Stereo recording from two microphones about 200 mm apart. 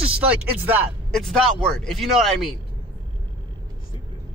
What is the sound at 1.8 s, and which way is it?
Speech, centre (ahead or behind).